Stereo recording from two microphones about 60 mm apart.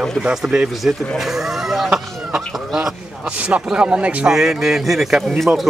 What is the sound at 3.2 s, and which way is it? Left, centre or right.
A man's voice, centre.